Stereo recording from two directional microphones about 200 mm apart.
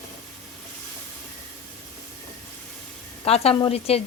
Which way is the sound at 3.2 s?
30° left (ahead or behind).